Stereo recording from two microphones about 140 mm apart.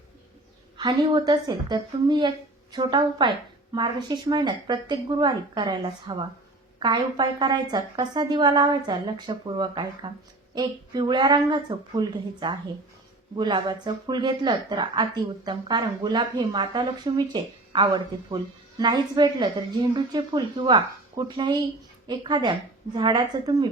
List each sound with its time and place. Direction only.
0.8 s a woman's voice: 30° right (ahead or behind)